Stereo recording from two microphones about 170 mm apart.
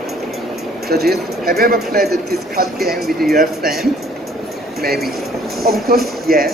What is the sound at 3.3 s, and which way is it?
Speech, 60° right (ahead or behind).